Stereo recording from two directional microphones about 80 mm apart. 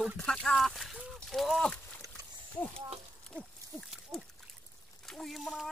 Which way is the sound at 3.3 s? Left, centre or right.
Right.